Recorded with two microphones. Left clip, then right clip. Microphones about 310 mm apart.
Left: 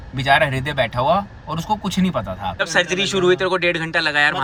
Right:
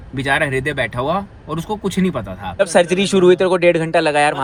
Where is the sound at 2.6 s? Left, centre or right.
Centre.